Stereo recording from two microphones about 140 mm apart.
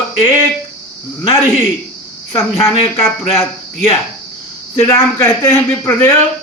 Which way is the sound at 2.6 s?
20° left (ahead or behind).